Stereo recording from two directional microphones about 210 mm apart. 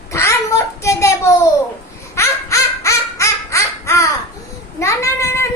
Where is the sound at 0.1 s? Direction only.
10° left (ahead or behind).